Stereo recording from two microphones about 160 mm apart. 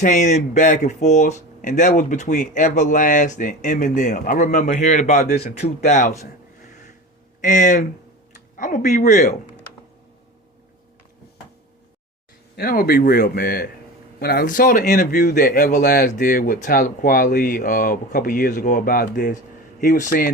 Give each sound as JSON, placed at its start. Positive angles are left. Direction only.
{"t": 0.0, "sound": "speech", "side_deg": 50}
{"t": 7.4, "sound": "speech", "side_deg": 50}
{"t": 12.5, "sound": "speech", "side_deg": 70}